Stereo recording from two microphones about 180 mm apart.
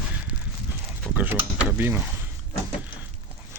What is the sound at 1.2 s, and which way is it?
Speech, 10° right (ahead or behind).